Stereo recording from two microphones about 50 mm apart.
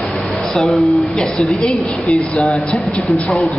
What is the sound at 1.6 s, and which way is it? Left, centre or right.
Speech, left.